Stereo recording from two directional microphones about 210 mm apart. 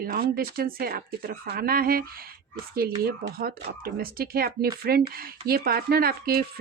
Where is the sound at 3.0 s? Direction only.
45° right (ahead or behind).